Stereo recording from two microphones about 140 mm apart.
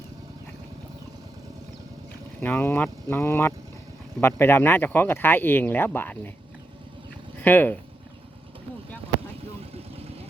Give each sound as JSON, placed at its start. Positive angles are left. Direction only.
{"t": 2.4, "sound": "speech", "side_deg": 15}
{"t": 7.4, "sound": "speech", "side_deg": 15}